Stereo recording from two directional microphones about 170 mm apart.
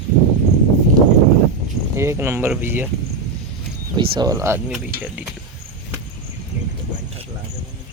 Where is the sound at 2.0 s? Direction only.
15° right (ahead or behind).